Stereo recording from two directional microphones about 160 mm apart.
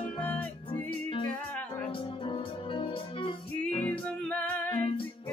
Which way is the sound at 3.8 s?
10° left (ahead or behind).